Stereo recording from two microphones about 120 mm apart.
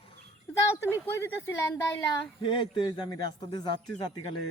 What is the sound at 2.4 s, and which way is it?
A man's voice, 45° left (ahead or behind).